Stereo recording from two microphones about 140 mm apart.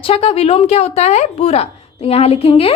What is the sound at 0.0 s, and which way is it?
A woman's voice, 45° left (ahead or behind).